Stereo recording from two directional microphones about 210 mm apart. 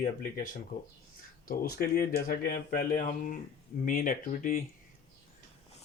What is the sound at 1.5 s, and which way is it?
Speech, 45° left (ahead or behind).